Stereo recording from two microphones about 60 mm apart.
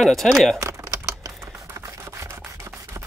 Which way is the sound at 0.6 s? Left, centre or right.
Right.